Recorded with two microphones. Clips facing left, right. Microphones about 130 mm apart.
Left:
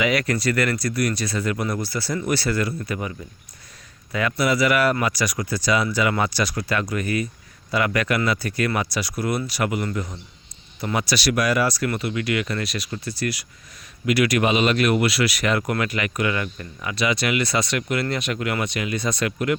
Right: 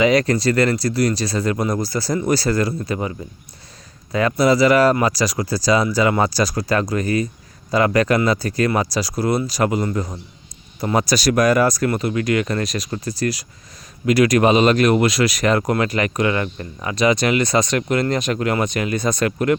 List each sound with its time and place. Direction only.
0.0 s speech: 35° right (ahead or behind)